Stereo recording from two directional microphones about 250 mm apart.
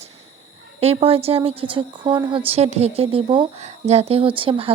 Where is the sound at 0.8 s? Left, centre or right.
Right.